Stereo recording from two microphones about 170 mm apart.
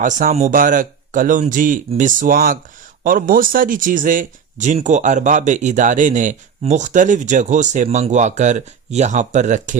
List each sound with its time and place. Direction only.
0.0 s speech: 50° right (ahead or behind)